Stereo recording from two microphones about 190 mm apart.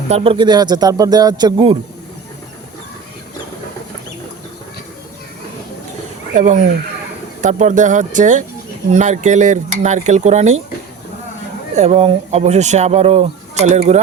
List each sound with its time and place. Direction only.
0.1 s speech: 30° right (ahead or behind)
6.3 s speech: 40° right (ahead or behind)
11.8 s speech: 35° right (ahead or behind)